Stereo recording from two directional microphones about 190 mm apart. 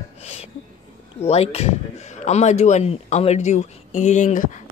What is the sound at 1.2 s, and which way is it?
Speech, 35° left (ahead or behind).